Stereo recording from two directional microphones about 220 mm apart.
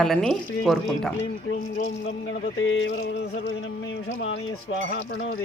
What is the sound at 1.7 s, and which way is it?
Speech, 45° left (ahead or behind).